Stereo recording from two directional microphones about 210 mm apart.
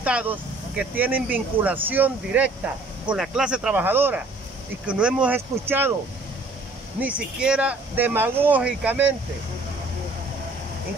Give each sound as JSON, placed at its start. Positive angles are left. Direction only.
{"t": 0.0, "sound": "speech", "side_deg": -5}
{"t": 7.0, "sound": "speech", "side_deg": -5}